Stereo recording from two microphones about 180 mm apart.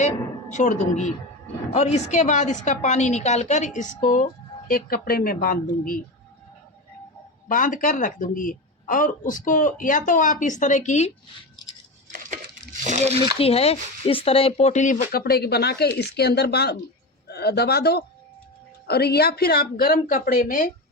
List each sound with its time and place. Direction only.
0.5 s a woman's voice: 45° left (ahead or behind)
7.4 s speech: 45° left (ahead or behind)
12.1 s a sound: 45° right (ahead or behind)
13.4 s speech: 35° left (ahead or behind); by 20.7 s 50° left (ahead or behind)